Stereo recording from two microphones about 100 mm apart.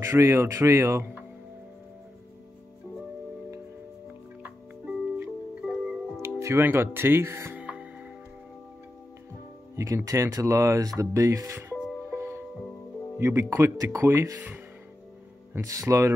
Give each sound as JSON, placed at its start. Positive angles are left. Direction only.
{"t": 0.0, "sound": "speech", "side_deg": -30}
{"t": 4.4, "sound": "music", "side_deg": -15}
{"t": 6.2, "sound": "speech", "side_deg": -25}
{"t": 7.5, "sound": "music", "side_deg": -15}
{"t": 9.8, "sound": "speech", "side_deg": -30}
{"t": 12.2, "sound": "music", "side_deg": -25}
{"t": 13.2, "sound": "speech", "side_deg": -25}
{"t": 15.6, "sound": "speech", "side_deg": -35}